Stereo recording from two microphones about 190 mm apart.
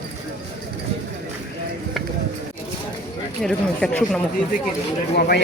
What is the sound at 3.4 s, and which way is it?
Speech, 5° left (ahead or behind).